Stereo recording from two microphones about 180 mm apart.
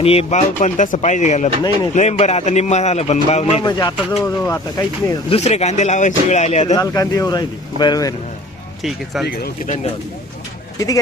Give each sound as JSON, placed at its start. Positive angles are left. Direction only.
{"t": 0.0, "sound": "a man's voice", "side_deg": 35}
{"t": 5.3, "sound": "a man's voice", "side_deg": 35}
{"t": 6.7, "sound": "speech", "side_deg": 20}
{"t": 8.8, "sound": "speech", "side_deg": 0}
{"t": 10.8, "sound": "speech", "side_deg": 20}